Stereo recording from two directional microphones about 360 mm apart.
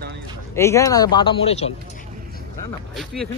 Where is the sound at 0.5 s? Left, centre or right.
Centre.